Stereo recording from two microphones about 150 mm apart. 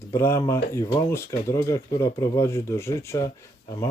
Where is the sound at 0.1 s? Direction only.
20° left (ahead or behind).